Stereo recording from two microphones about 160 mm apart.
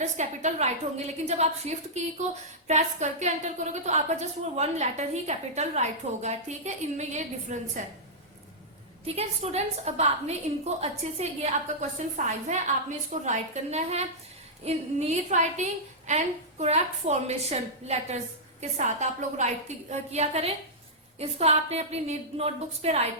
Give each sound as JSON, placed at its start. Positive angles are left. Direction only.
{"t": 0.0, "sound": "a woman's voice", "side_deg": -45}
{"t": 9.0, "sound": "a woman's voice", "side_deg": -40}